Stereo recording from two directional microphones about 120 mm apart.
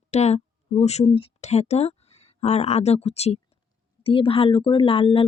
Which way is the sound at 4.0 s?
50° left (ahead or behind).